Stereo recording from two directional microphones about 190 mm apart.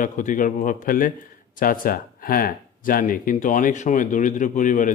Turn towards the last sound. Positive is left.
turn(degrees=40)  # may be behind; listen again after turning